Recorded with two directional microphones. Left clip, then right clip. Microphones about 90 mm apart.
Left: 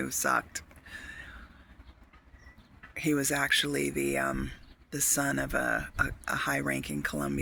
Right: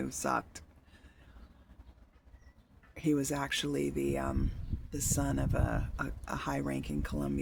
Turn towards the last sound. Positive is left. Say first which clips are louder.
# left 6 dB
turn(degrees=-15)  # may be behind; listen again after turning